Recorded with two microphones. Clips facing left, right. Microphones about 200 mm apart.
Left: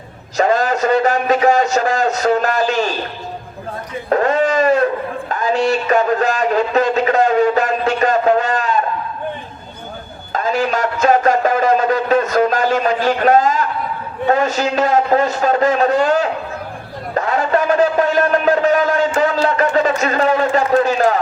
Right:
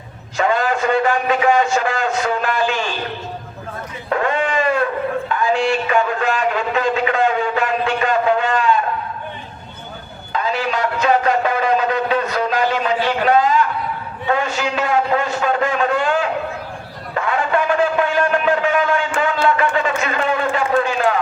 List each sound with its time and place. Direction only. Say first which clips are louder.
0.3 s a man's voice: left 3 dB; 40° left (ahead or behind)
4.1 s a sound: left 4 dB; 40° left (ahead or behind)
10.3 s music: left 3 dB; 45° left (ahead or behind)
14.3 s a man's voice: left 4 dB; 40° left (ahead or behind)
17.2 s a sound: left 2 dB; 40° left (ahead or behind)
19.2 s a man's voice: left 2 dB; 40° left (ahead or behind)